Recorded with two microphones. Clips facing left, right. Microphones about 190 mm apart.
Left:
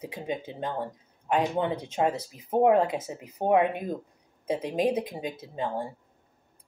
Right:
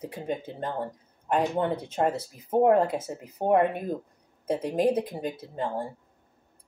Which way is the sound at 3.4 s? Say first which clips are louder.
Right 1 dB; 15° left (ahead or behind).